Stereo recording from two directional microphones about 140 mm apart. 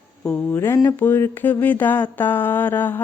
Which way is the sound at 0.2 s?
10° left (ahead or behind).